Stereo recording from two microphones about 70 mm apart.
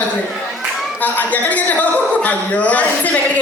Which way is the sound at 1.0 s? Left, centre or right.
Left.